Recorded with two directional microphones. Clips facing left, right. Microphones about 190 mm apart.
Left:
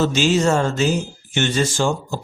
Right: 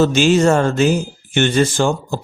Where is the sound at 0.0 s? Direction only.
55° right (ahead or behind).